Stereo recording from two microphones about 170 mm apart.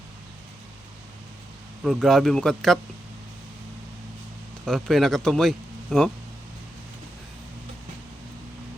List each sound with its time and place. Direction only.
1.8 s a man's voice: centre (ahead or behind)
4.6 s a man's voice: centre (ahead or behind)